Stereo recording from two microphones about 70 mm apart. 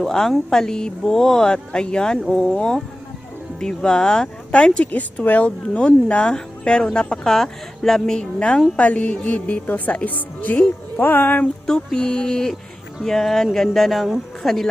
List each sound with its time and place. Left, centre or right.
0.0 s a woman's voice: centre; by 11.4 s left
11.6 s speech: centre